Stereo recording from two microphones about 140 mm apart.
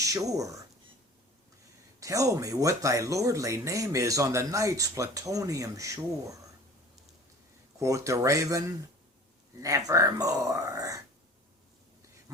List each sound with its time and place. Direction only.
0.0 s speech: 25° right (ahead or behind)
2.0 s speech: 25° right (ahead or behind)
7.8 s speech: 20° right (ahead or behind)